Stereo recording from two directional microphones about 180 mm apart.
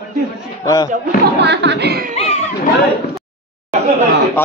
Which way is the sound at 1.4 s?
75° right (ahead or behind).